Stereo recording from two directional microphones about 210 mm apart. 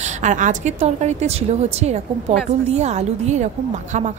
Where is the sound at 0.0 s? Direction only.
35° right (ahead or behind).